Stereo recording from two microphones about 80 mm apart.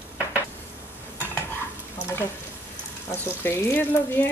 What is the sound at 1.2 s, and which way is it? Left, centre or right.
Stir, left.